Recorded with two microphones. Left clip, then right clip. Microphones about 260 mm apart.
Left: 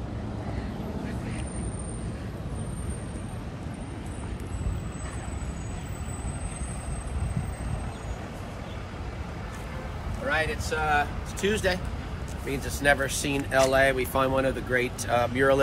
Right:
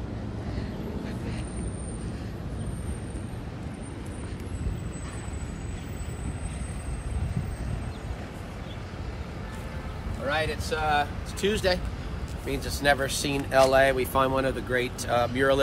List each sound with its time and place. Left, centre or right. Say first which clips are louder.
10.2 s speech: left 1 dB; centre